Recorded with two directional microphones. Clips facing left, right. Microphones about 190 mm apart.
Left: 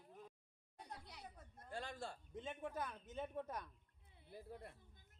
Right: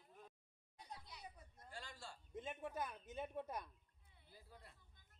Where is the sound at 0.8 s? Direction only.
65° left (ahead or behind).